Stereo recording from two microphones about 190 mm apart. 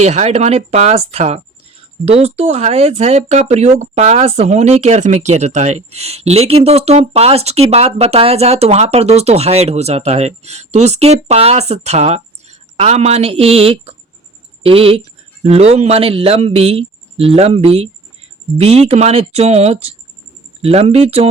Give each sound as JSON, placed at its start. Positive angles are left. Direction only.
{"t": 0.0, "sound": "speech", "side_deg": -35}